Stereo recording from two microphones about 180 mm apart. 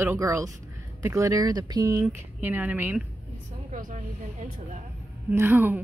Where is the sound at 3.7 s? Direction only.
45° right (ahead or behind).